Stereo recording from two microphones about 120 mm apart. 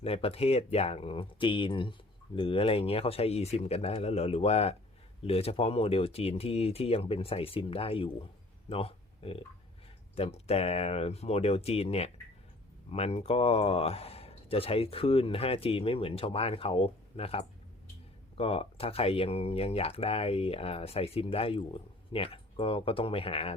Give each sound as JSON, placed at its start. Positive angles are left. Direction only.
{"t": 0.0, "sound": "speech", "side_deg": 55}